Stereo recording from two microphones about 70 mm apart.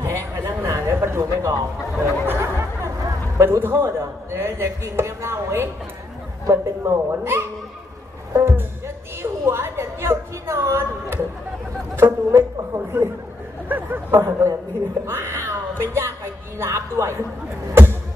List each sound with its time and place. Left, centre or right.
0.0 s a sound: right
0.9 s a man's voice: right
2.2 s music: right
3.3 s a man's voice: right
13.7 s speech: right
14.1 s a man's voice: right